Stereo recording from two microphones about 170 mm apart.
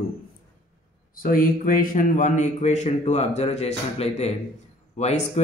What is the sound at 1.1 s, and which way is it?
A man's voice, 55° left (ahead or behind).